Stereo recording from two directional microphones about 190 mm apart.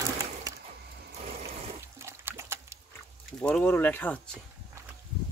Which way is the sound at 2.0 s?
15° right (ahead or behind).